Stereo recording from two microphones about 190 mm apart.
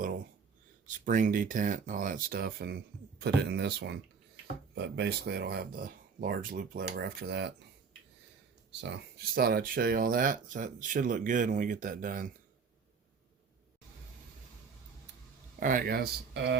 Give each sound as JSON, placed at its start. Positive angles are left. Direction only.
{"t": 0.9, "sound": "speech", "side_deg": -45}
{"t": 8.7, "sound": "speech", "side_deg": -65}
{"t": 15.6, "sound": "speech", "side_deg": -45}